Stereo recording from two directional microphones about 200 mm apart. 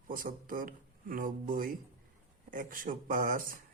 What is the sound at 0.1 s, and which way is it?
Speech, 45° right (ahead or behind).